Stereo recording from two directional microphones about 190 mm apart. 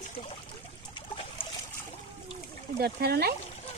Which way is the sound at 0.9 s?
25° left (ahead or behind).